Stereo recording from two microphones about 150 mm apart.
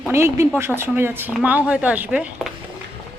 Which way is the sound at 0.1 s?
15° right (ahead or behind).